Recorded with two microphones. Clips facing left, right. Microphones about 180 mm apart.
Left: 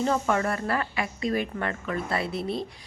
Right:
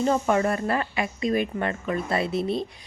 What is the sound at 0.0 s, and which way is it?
A woman's voice, 20° right (ahead or behind).